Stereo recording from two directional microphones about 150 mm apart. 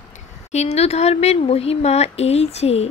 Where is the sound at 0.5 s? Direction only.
45° left (ahead or behind).